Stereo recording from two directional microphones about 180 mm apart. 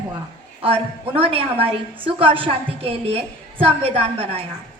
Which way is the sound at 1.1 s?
30° right (ahead or behind).